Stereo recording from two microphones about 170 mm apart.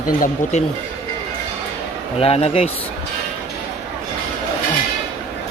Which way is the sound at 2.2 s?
35° left (ahead or behind).